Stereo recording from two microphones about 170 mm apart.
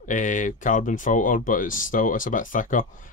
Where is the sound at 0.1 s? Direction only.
50° left (ahead or behind).